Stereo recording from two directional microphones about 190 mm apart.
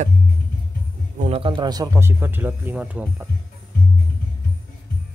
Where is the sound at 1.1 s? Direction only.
35° right (ahead or behind); by 3.3 s 5° right (ahead or behind).